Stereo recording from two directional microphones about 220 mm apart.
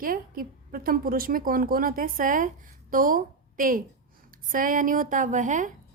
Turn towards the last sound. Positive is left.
turn(degrees=-35)  # may be behind; listen again after turning